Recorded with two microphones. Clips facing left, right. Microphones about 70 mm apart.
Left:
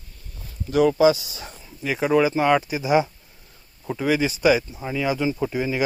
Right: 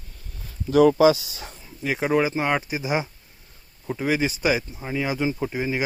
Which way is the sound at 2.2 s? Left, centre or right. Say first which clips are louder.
Left 4 dB; right.